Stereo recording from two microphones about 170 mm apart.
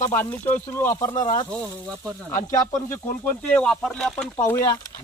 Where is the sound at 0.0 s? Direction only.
10° left (ahead or behind).